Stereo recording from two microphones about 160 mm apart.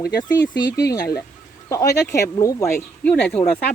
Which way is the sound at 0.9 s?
75° left (ahead or behind).